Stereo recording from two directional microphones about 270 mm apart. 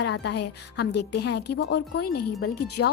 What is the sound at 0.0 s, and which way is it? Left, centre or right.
A woman's voice, left.